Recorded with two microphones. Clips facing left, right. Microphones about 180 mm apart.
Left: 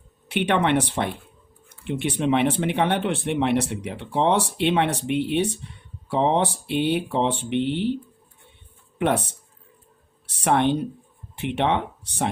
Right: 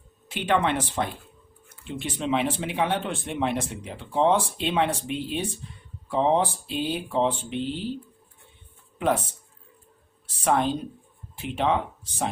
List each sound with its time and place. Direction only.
0.3 s speech: 65° left (ahead or behind)
9.0 s speech: 70° left (ahead or behind)